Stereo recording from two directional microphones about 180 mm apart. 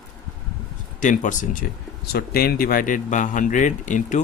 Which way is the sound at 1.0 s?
45° left (ahead or behind).